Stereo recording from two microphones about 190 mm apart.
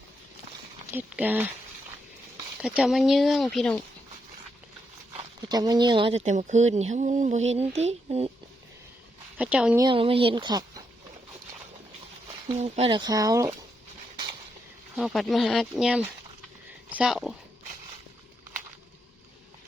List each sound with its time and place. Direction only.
0.9 s speech: 10° right (ahead or behind)
2.6 s speech: 5° right (ahead or behind)
5.5 s speech: 20° right (ahead or behind)
9.4 s speech: 5° right (ahead or behind)
9.8 s speech: 30° right (ahead or behind)
12.5 s speech: 30° right (ahead or behind); by 13.6 s 15° right (ahead or behind)
14.9 s speech: centre (ahead or behind)